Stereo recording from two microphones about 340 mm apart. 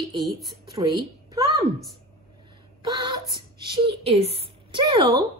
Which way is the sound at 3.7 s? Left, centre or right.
Centre.